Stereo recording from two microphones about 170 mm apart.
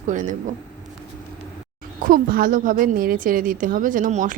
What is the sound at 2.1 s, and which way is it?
Speech, 55° right (ahead or behind).